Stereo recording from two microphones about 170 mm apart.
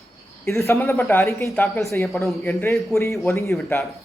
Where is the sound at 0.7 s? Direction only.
15° left (ahead or behind).